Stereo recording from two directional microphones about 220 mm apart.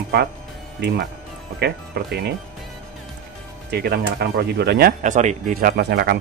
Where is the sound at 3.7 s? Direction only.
45° right (ahead or behind).